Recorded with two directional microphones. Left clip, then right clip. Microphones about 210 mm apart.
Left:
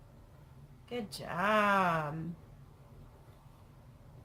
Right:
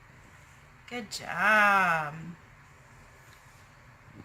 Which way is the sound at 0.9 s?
60° left (ahead or behind).